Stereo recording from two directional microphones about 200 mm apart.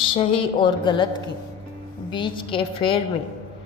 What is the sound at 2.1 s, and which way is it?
Speech, 25° left (ahead or behind).